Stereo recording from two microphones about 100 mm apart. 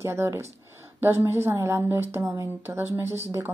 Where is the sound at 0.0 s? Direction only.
30° right (ahead or behind).